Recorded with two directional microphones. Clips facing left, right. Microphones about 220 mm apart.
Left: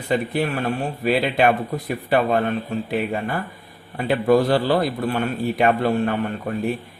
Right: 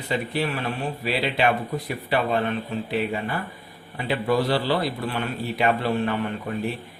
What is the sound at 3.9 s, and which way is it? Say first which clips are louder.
A man's voice: left 6 dB; 45° left (ahead or behind).